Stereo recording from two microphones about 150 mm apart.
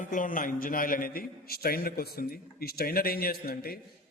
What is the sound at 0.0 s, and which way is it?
A man's voice, 60° left (ahead or behind).